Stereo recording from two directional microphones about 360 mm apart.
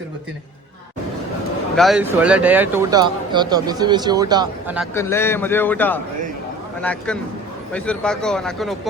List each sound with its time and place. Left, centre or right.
1.7 s speech: centre
4.9 s speech: centre
7.7 s speech: centre